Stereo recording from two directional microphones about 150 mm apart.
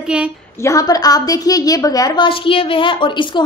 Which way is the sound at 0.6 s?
25° left (ahead or behind).